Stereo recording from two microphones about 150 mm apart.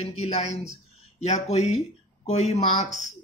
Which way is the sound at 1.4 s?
45° left (ahead or behind).